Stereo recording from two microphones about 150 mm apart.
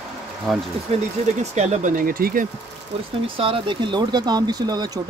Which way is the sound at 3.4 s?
35° right (ahead or behind).